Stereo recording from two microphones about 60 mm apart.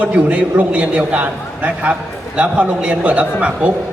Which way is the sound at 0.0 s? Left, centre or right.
Right.